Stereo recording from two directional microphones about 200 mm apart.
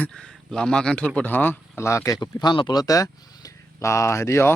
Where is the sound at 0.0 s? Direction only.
5° left (ahead or behind).